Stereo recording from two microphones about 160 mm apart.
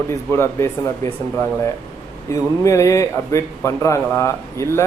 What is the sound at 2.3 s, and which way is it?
A man's voice, 20° left (ahead or behind).